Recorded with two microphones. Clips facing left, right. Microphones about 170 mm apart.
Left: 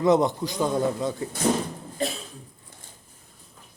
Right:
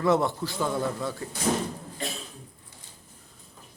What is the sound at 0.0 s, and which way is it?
A man's voice, 20° left (ahead or behind).